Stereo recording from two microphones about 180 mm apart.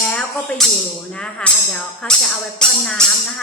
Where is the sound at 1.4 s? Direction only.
5° left (ahead or behind).